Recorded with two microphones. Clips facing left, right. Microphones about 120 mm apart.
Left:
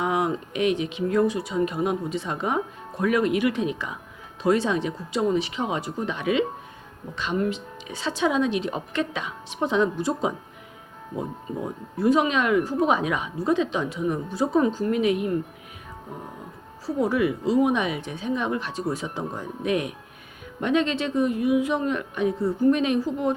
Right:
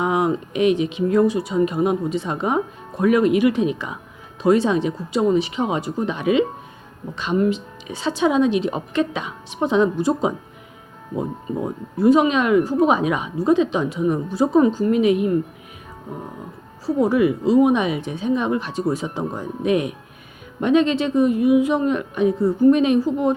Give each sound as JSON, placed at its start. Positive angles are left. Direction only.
{"t": 0.0, "sound": "speech", "side_deg": -25}
{"t": 12.0, "sound": "speech", "side_deg": -20}
{"t": 17.0, "sound": "speech", "side_deg": -25}